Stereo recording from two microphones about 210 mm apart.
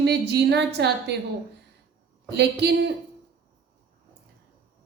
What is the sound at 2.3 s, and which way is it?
Speech, 50° right (ahead or behind).